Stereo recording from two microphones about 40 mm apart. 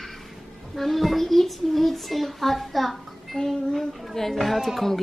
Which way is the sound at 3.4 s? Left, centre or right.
Centre.